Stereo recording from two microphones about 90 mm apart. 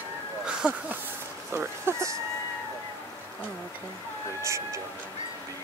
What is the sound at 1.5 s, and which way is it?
Speech, 30° right (ahead or behind).